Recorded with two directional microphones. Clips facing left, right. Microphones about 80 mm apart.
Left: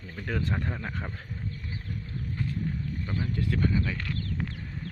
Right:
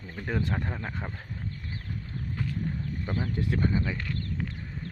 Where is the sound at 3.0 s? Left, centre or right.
Right.